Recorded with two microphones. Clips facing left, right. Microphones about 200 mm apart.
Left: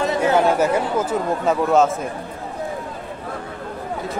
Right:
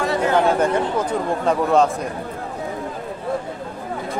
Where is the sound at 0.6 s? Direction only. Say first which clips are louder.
Even; 5° left (ahead or behind).